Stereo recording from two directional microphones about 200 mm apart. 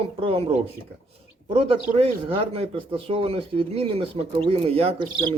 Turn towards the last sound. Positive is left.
turn(degrees=-30)  # may be behind; listen again after turning